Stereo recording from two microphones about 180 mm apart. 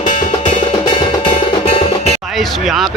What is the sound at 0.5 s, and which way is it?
Music, 25° left (ahead or behind).